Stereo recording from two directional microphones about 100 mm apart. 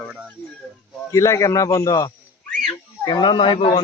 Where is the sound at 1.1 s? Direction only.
30° left (ahead or behind).